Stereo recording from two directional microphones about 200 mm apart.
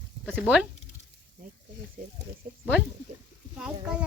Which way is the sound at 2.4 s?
45° right (ahead or behind).